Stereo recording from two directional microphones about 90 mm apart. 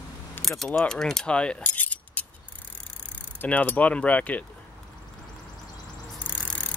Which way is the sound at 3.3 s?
20° left (ahead or behind).